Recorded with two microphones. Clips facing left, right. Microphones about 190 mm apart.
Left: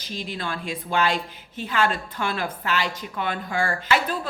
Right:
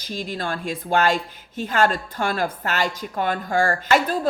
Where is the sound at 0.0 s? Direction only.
45° right (ahead or behind).